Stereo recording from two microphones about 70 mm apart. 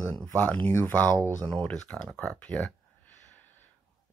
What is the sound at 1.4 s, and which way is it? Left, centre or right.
Speech, centre.